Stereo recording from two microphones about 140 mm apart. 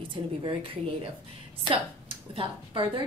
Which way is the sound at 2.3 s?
40° right (ahead or behind).